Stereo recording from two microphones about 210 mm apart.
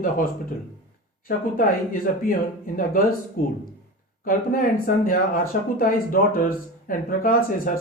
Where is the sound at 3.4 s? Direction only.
40° left (ahead or behind).